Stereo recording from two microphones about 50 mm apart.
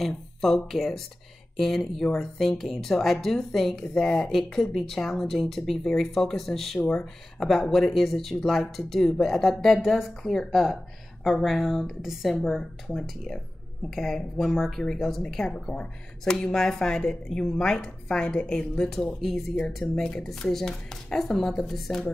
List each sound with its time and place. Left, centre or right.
0.4 s a woman's voice: centre